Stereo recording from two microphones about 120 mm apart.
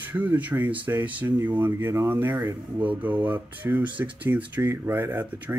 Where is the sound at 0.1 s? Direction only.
15° right (ahead or behind).